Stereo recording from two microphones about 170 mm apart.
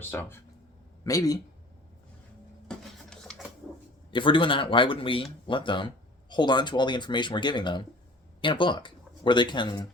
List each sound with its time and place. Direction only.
0.1 s speech: 10° left (ahead or behind)
2.6 s a sound: 5° left (ahead or behind)
4.1 s speech: 30° left (ahead or behind)